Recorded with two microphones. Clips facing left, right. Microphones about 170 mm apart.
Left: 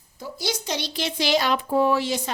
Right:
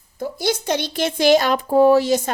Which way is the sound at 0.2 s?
55° right (ahead or behind).